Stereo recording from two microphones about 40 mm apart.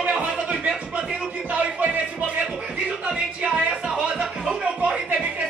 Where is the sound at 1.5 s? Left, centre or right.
Right; by 5.3 s centre.